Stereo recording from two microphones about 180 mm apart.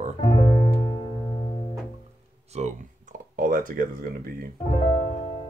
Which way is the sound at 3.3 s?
50° right (ahead or behind).